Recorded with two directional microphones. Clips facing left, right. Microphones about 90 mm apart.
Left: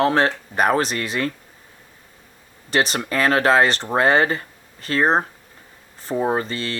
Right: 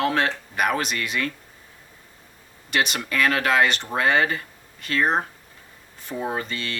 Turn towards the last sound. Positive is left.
turn(degrees=35)  # may be behind; listen again after turning